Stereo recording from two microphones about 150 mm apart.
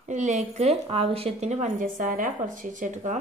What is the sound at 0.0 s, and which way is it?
A woman's voice, 55° right (ahead or behind).